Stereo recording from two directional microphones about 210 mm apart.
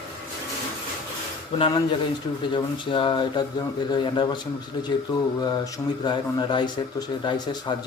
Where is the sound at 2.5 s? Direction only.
25° left (ahead or behind).